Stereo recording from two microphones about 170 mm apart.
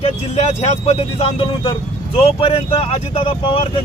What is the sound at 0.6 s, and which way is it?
Speech, 40° left (ahead or behind).